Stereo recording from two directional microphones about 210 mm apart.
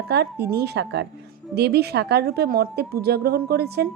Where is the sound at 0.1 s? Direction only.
50° right (ahead or behind).